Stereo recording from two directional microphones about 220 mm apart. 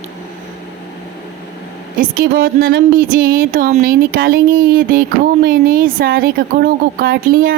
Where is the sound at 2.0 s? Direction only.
40° right (ahead or behind).